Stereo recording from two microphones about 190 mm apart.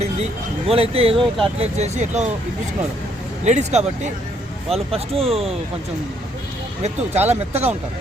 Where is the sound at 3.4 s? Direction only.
35° right (ahead or behind).